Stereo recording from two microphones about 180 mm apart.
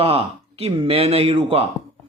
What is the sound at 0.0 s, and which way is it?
Speech, 35° right (ahead or behind).